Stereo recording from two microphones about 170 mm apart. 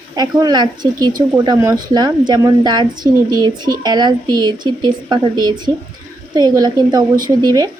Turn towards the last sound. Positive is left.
turn(degrees=-20)  # may be behind; listen again after turning